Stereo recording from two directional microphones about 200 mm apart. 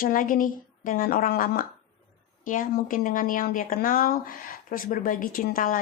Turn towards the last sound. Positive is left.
turn(degrees=45)  # may be behind; listen again after turning